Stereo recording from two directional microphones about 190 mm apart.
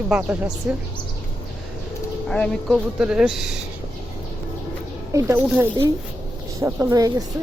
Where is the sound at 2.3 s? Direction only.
5° left (ahead or behind).